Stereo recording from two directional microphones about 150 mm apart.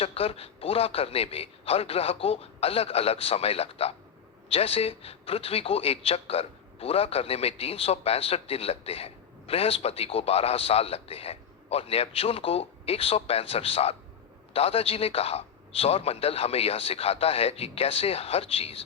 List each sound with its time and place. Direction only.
0.0 s a man's voice: 40° left (ahead or behind)